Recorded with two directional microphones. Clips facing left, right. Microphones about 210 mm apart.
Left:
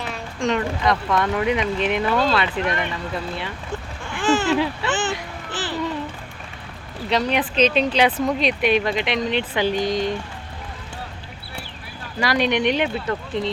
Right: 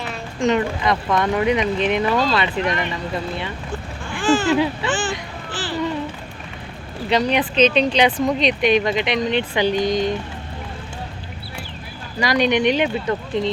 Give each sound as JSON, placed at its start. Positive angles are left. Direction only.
{"t": 0.3, "sound": "speech", "side_deg": -5}
{"t": 4.2, "sound": "a sound", "side_deg": 20}
{"t": 4.4, "sound": "speech", "side_deg": -5}
{"t": 7.1, "sound": "speech", "side_deg": 0}
{"t": 12.2, "sound": "speech", "side_deg": 0}